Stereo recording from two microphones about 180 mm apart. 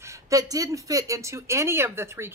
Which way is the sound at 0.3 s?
20° right (ahead or behind).